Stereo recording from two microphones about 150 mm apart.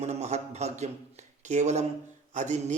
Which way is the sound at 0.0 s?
45° right (ahead or behind).